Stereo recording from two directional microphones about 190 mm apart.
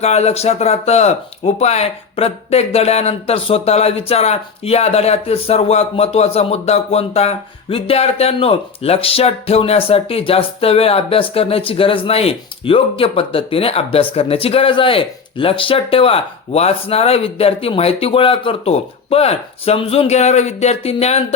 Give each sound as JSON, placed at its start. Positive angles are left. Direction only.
{"t": 0.0, "sound": "speech", "side_deg": 35}